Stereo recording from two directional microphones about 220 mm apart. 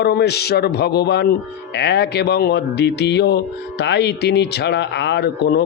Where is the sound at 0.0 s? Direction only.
50° left (ahead or behind).